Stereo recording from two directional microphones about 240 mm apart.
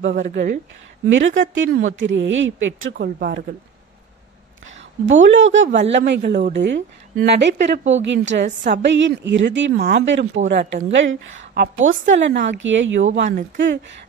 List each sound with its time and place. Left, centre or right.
0.1 s a woman's voice: right
5.0 s a woman's voice: right